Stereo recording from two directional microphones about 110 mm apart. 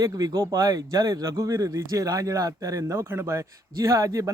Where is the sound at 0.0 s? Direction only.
30° right (ahead or behind).